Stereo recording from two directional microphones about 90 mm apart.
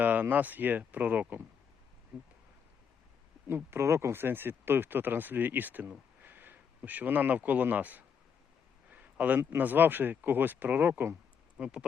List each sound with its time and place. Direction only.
0.0 s speech: 20° right (ahead or behind)
3.4 s speech: 25° right (ahead or behind)
8.9 s a sound: 15° right (ahead or behind)
9.4 s speech: 25° right (ahead or behind)
11.5 s speech: 10° right (ahead or behind)